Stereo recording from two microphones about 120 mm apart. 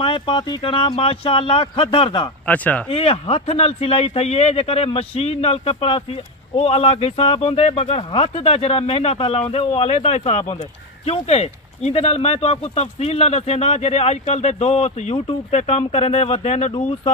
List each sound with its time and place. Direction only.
0.0 s speech: 40° left (ahead or behind)
2.4 s speech: 10° left (ahead or behind)
2.9 s speech: 55° left (ahead or behind)
15.5 s speech: 65° left (ahead or behind)